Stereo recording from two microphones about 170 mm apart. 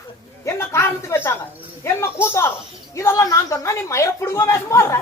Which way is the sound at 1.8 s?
15° left (ahead or behind).